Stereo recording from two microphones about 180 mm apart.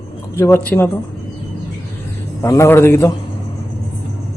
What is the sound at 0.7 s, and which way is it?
Speech, 10° left (ahead or behind).